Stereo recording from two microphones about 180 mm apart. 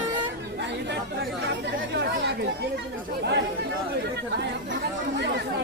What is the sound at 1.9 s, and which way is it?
Chatter, 75° right (ahead or behind).